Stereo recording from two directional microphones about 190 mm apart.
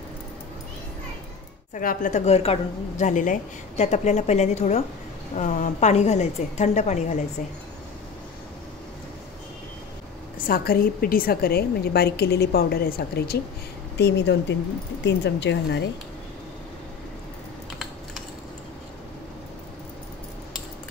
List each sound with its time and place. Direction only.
1.7 s a woman's voice: 45° left (ahead or behind)
10.4 s a woman's voice: 50° left (ahead or behind)
13.9 s a woman's voice: 65° left (ahead or behind)